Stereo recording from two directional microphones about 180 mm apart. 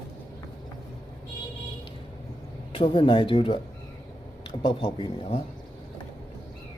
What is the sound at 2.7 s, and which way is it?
Speech, 30° left (ahead or behind).